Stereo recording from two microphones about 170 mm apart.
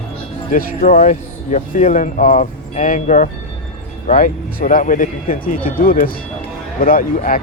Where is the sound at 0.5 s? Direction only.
55° left (ahead or behind).